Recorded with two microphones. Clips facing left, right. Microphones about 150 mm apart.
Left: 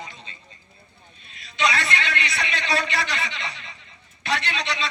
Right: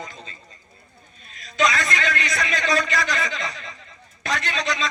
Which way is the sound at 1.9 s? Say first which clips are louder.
Right 2 dB; 40° right (ahead or behind).